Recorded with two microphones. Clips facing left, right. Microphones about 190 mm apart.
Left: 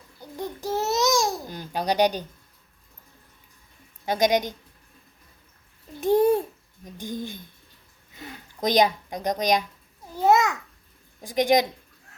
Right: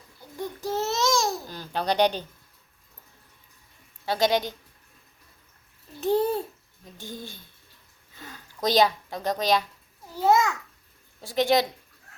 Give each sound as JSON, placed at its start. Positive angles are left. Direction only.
{"t": 0.7, "sound": "babbling", "side_deg": 15}
{"t": 4.0, "sound": "speech", "side_deg": 15}
{"t": 6.0, "sound": "babbling", "side_deg": 15}
{"t": 6.9, "sound": "speech", "side_deg": 15}
{"t": 10.2, "sound": "babbling", "side_deg": 20}
{"t": 11.2, "sound": "speech", "side_deg": 15}